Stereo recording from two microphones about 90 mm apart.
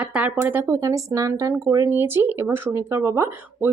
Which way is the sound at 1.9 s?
25° right (ahead or behind).